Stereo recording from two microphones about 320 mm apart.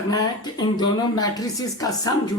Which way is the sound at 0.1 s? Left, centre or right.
Centre.